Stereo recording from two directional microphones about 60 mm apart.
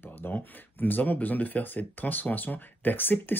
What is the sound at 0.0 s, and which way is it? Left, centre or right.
Speech, left.